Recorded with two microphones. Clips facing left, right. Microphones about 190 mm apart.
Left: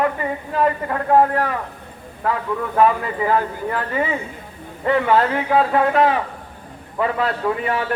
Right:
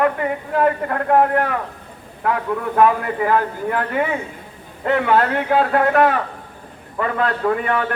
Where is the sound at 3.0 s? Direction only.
65° right (ahead or behind).